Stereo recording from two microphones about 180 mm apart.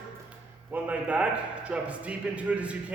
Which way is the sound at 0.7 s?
5° right (ahead or behind).